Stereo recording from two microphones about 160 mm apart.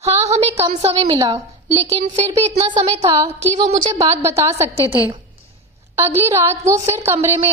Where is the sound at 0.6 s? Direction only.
40° right (ahead or behind).